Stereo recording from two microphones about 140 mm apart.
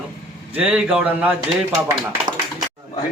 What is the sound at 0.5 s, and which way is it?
Speech, 10° right (ahead or behind).